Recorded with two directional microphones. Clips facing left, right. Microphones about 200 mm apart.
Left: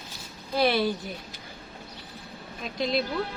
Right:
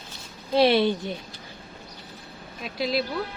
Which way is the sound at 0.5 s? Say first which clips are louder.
Right 5 dB; 25° right (ahead or behind).